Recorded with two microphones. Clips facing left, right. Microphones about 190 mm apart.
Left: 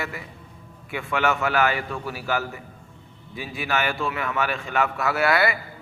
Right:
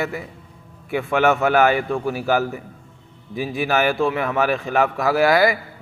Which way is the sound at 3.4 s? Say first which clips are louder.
Right 6 dB; 40° right (ahead or behind).